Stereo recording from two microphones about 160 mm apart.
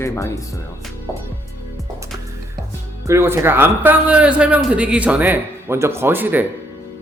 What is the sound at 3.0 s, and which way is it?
Speech, 15° right (ahead or behind).